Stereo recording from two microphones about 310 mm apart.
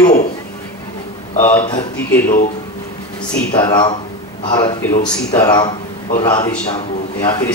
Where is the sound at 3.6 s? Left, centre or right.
Centre.